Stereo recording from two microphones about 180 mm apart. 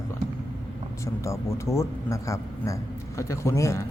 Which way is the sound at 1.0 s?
15° left (ahead or behind).